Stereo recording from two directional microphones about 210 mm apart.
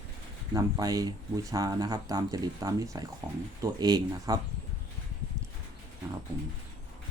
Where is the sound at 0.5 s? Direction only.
15° right (ahead or behind).